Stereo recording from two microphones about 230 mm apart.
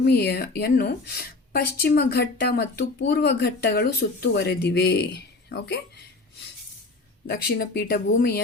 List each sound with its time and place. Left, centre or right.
0.0 s a woman's voice: left
7.3 s a woman's voice: left